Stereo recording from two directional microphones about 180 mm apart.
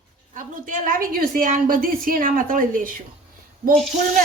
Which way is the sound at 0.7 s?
50° right (ahead or behind).